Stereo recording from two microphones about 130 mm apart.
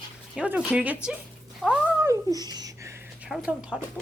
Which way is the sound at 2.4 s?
30° right (ahead or behind).